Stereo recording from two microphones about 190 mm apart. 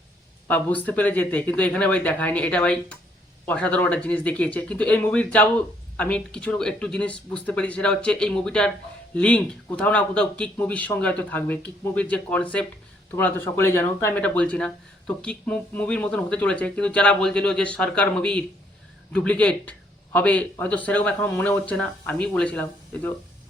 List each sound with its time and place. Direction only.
0.4 s speech: 10° left (ahead or behind)